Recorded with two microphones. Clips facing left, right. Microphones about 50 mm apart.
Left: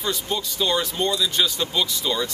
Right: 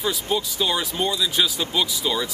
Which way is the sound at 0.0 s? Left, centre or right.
Centre.